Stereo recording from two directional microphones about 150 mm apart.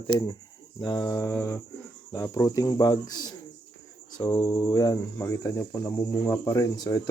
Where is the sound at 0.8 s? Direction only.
30° left (ahead or behind).